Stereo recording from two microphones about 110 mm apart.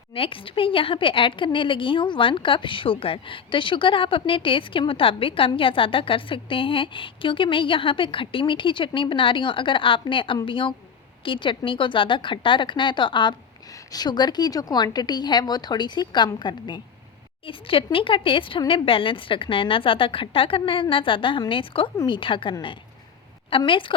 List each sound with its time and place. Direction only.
0.1 s speech: 55° left (ahead or behind)
13.7 s a woman's voice: 35° left (ahead or behind); by 23.9 s 50° left (ahead or behind)